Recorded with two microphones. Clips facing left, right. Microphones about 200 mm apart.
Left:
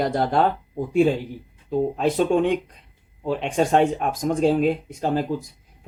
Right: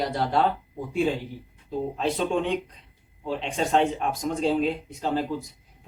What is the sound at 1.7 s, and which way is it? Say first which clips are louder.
Speech: left 6 dB; 50° left (ahead or behind).